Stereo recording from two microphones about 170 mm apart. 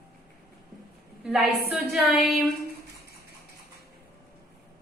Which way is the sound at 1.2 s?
5° right (ahead or behind).